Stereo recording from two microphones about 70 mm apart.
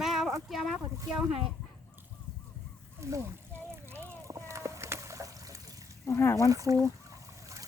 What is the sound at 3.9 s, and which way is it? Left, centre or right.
Boat, right.